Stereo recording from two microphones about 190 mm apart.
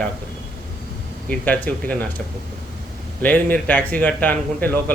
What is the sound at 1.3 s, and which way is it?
Speech, 10° left (ahead or behind).